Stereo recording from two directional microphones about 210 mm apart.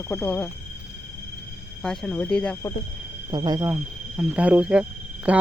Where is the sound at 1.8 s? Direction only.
5° left (ahead or behind).